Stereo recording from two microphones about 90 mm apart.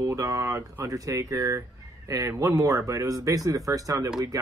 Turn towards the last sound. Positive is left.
turn(degrees=-40)  # may be behind; listen again after turning